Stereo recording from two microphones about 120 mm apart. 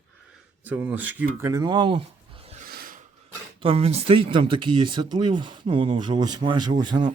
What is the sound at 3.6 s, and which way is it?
Speech, 55° right (ahead or behind).